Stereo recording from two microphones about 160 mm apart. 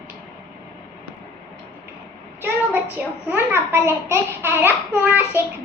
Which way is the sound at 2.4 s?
10° right (ahead or behind).